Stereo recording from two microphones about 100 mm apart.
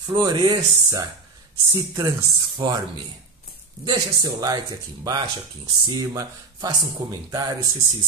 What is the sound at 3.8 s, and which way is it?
Speech, 45° right (ahead or behind).